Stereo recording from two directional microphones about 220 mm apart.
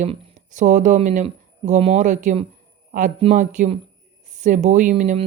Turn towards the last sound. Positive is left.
turn(degrees=-30)  # may be behind; listen again after turning